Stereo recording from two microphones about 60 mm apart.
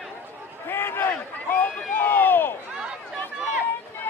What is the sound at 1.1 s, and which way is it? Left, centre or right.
Crowd, left.